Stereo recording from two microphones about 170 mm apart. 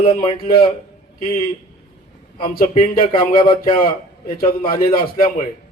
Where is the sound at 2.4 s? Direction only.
60° left (ahead or behind).